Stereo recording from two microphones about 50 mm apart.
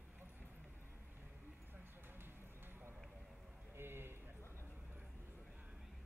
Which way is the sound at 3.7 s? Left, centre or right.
Right.